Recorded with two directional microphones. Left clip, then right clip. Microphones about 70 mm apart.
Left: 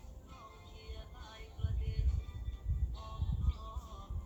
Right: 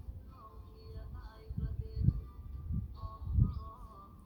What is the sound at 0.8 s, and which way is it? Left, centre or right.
Music, right.